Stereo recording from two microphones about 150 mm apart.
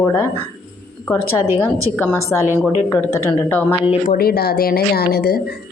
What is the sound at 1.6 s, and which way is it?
A woman's voice, 15° left (ahead or behind).